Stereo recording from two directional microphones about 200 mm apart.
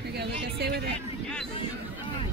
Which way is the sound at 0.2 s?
55° right (ahead or behind).